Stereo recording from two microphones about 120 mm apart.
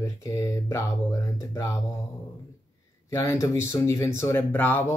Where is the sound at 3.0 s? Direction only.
25° left (ahead or behind).